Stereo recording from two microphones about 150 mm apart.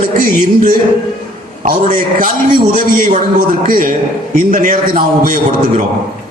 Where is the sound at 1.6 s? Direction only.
65° right (ahead or behind).